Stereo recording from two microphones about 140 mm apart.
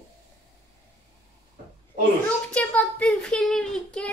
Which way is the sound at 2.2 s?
10° left (ahead or behind).